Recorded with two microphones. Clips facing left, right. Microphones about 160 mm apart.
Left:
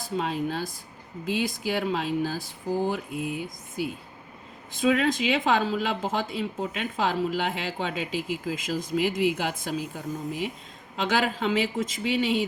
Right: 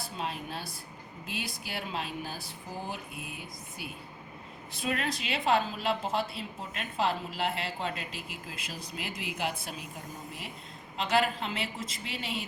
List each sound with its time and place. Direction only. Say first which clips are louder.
0.0 s speech: left 9 dB; 90° left